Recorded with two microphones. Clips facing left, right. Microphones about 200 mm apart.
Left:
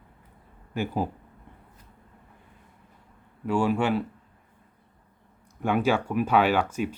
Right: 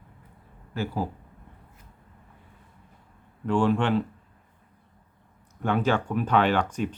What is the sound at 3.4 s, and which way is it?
Speech, 10° left (ahead or behind).